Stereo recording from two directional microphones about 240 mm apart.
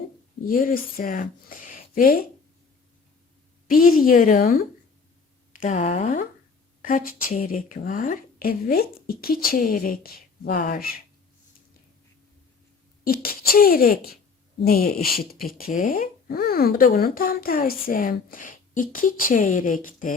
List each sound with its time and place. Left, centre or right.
0.4 s speech: left
3.7 s speech: left
13.1 s speech: left